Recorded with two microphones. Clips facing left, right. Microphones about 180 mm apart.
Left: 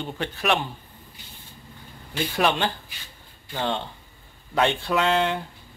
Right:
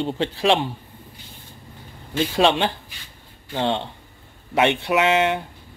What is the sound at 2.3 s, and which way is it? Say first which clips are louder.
A man's voice: right 4 dB; 25° right (ahead or behind).